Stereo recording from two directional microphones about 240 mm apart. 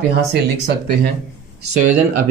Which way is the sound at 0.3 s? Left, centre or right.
Right.